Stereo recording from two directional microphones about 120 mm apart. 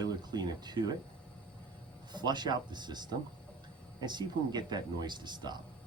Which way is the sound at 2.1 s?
35° right (ahead or behind).